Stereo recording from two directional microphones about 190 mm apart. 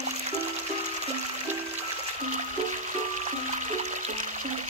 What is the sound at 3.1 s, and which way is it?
Music, 40° right (ahead or behind).